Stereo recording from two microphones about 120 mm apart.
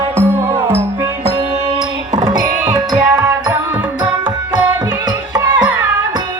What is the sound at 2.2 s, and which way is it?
Music, 35° right (ahead or behind).